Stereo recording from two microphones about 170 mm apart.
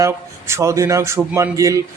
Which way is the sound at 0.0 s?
15° right (ahead or behind).